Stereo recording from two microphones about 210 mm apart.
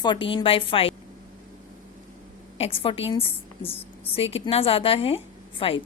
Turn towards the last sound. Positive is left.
turn(degrees=25)  # may be behind; listen again after turning